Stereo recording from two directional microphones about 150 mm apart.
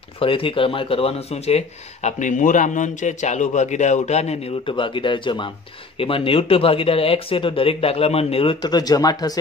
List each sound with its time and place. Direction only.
0.2 s speech: 35° left (ahead or behind)
8.5 s speech: 25° left (ahead or behind)